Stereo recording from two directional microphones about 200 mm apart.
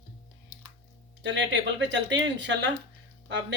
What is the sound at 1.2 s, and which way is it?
Speech, 65° right (ahead or behind).